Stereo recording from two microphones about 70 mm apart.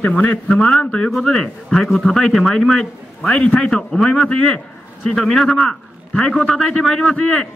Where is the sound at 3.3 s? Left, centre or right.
Centre.